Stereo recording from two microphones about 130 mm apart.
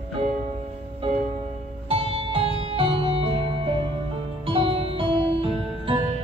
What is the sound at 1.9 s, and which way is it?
Music, 45° right (ahead or behind).